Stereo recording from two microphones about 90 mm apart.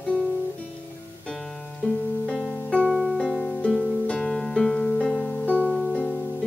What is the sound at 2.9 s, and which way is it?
Music, centre (ahead or behind).